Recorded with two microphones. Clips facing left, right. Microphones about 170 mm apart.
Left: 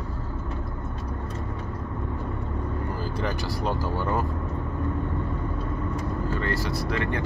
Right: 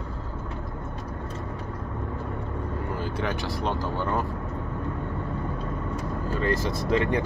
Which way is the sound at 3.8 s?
20° right (ahead or behind).